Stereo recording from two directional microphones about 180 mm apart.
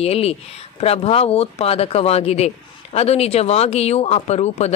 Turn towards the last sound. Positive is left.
turn(degrees=35)  # may be behind; listen again after turning